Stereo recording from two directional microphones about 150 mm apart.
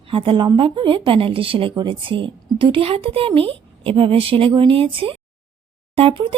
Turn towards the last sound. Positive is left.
turn(degrees=-35)  # may be behind; listen again after turning